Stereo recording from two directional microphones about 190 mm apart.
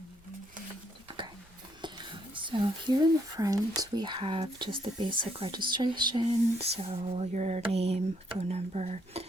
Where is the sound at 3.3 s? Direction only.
20° right (ahead or behind); by 9.2 s 35° right (ahead or behind).